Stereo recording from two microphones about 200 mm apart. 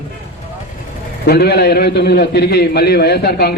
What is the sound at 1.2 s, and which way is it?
A man's voice, 50° left (ahead or behind).